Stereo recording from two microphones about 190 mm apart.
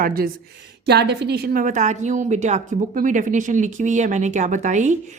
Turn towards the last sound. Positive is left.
turn(degrees=-40)  # may be behind; listen again after turning